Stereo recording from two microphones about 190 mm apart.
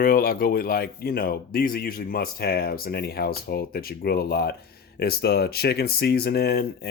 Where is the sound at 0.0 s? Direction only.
50° left (ahead or behind).